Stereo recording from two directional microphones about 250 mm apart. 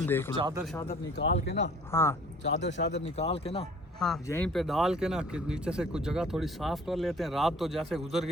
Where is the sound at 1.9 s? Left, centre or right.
Centre.